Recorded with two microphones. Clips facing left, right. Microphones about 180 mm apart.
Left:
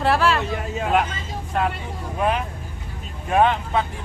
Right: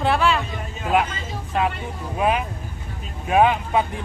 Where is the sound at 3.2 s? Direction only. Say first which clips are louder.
Right 1 dB; 10° right (ahead or behind).